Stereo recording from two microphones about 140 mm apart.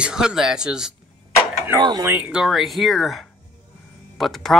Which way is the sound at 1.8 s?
30° right (ahead or behind).